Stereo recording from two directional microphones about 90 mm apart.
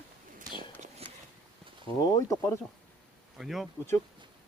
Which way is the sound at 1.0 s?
90° right.